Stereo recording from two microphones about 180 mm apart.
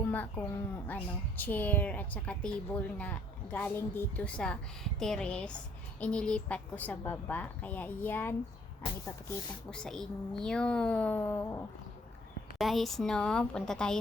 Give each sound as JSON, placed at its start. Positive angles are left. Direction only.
{"t": 0.1, "sound": "speech", "side_deg": 10}
{"t": 8.8, "sound": "speech", "side_deg": 30}
{"t": 9.6, "sound": "a woman's voice", "side_deg": 5}
{"t": 12.5, "sound": "a woman's voice", "side_deg": 0}